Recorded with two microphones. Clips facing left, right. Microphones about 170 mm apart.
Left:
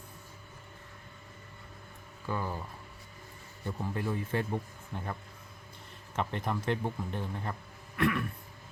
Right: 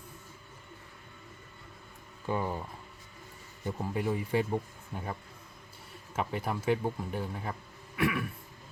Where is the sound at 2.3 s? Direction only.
20° right (ahead or behind).